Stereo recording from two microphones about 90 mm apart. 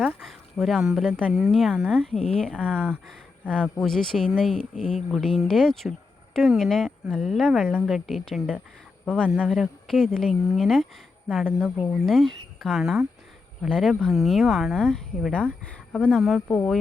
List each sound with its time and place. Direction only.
0.0 s a sound: centre (ahead or behind)
1.3 s speech: centre (ahead or behind)
1.7 s speech: 10° right (ahead or behind)
2.0 s speech: 10° left (ahead or behind)
2.6 s speech: 15° right (ahead or behind)
3.1 s speech: 10° left (ahead or behind)
9.2 s speech: 15° right (ahead or behind)
9.6 s speech: 5° left (ahead or behind)
11.9 s speech: centre (ahead or behind)
16.1 s speech: centre (ahead or behind)
16.5 s speech: 15° left (ahead or behind)